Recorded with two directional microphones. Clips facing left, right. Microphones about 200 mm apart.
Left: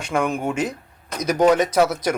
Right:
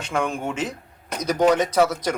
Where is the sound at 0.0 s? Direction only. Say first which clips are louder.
Left 3 dB; 10° left (ahead or behind).